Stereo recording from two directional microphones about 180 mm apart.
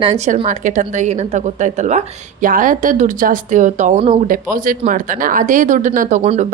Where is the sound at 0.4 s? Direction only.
45° right (ahead or behind).